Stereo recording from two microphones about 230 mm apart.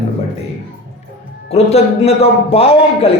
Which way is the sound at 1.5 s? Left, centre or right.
Left.